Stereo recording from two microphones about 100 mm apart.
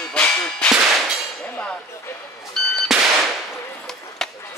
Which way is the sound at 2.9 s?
5° right (ahead or behind).